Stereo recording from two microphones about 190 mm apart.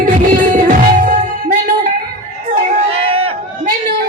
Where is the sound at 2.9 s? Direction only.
30° right (ahead or behind).